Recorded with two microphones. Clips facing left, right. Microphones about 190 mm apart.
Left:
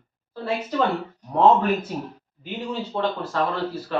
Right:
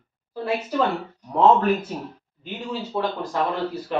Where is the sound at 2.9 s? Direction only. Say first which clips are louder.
Even; 15° right (ahead or behind).